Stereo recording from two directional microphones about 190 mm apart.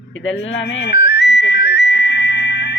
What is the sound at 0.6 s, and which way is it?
Music, 60° left (ahead or behind).